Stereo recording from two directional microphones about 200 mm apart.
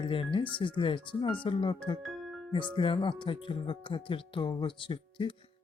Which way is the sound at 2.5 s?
25° left (ahead or behind).